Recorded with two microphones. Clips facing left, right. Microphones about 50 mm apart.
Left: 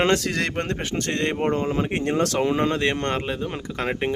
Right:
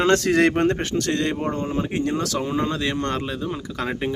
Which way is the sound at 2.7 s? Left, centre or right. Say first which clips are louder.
Left 2 dB; left.